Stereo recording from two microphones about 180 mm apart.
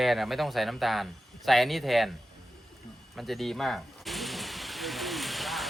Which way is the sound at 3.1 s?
Centre (ahead or behind).